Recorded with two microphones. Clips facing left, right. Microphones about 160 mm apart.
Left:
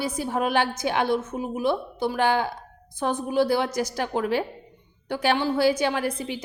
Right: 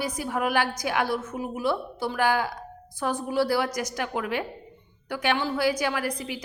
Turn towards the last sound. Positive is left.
turn(degrees=25)  # may be behind; listen again after turning